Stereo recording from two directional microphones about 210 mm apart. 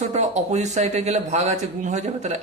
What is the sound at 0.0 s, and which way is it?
A man's voice, 35° right (ahead or behind).